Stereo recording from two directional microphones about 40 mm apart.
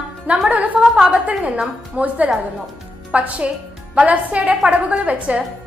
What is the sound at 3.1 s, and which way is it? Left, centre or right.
Speech, right.